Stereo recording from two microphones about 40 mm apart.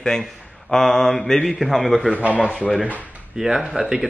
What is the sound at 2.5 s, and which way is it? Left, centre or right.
Speech, left.